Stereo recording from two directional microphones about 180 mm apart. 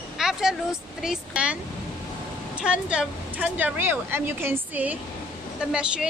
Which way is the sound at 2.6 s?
5° right (ahead or behind).